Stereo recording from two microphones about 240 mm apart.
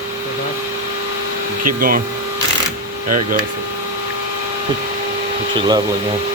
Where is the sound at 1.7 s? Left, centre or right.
Right.